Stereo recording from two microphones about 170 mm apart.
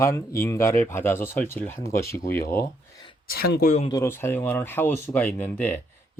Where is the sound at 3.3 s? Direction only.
65° left (ahead or behind).